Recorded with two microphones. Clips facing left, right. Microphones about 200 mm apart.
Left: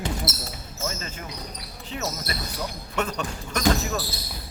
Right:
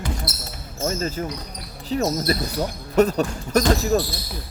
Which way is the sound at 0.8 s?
40° right (ahead or behind).